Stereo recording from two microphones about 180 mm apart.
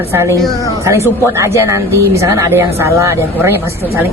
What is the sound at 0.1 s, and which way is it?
Speech, 15° right (ahead or behind).